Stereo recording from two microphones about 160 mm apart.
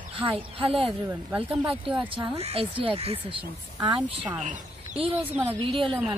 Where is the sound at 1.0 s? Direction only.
10° right (ahead or behind).